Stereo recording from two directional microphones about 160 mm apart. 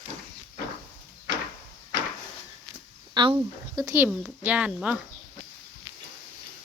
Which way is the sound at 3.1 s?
30° right (ahead or behind).